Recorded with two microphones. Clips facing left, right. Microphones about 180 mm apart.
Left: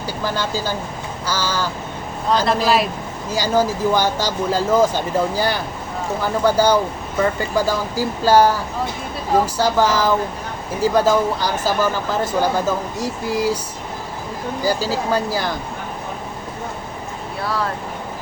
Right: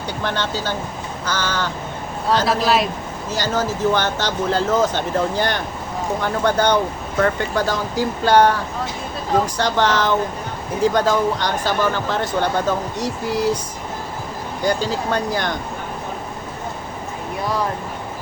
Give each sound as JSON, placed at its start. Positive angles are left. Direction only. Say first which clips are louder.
{"t": 0.2, "sound": "speech", "louder": "left 1 dB", "side_deg": 5}
{"t": 14.6, "sound": "speech", "louder": "even", "side_deg": 5}
{"t": 17.4, "sound": "speech", "louder": "right 1 dB", "side_deg": -15}